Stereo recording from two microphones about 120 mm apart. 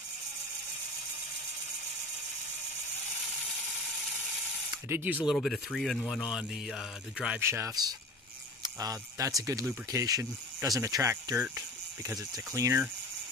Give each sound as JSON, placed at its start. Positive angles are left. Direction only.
{"t": 4.6, "sound": "speech", "side_deg": -15}
{"t": 5.3, "sound": "speech", "side_deg": 0}
{"t": 7.3, "sound": "speech", "side_deg": -20}